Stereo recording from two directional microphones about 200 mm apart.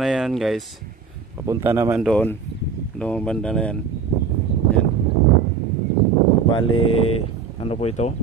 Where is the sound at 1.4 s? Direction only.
15° right (ahead or behind).